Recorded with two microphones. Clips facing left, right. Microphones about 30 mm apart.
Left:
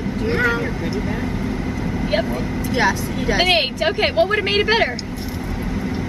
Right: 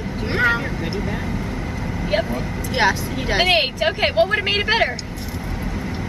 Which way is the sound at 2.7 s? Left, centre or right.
Right.